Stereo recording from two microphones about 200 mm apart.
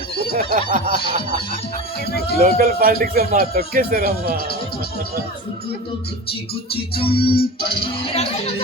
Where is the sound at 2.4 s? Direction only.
45° right (ahead or behind).